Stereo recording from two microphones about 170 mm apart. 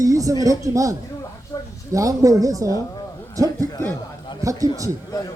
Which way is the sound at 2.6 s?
20° left (ahead or behind).